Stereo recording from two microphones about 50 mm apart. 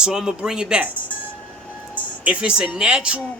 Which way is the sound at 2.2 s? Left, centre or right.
Right.